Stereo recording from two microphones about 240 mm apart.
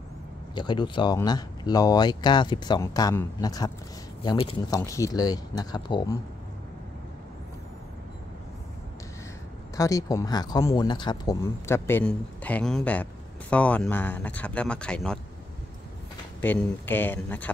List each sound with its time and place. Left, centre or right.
0.6 s speech: centre
9.8 s speech: centre
16.3 s speech: centre